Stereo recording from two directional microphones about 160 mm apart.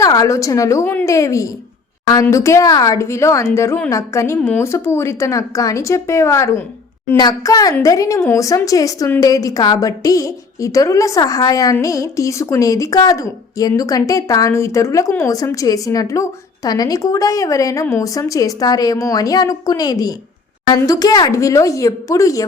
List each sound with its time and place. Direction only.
0.0 s a woman's voice: 20° left (ahead or behind)